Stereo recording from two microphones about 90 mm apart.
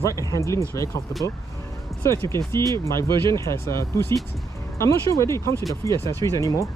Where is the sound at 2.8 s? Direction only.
30° left (ahead or behind).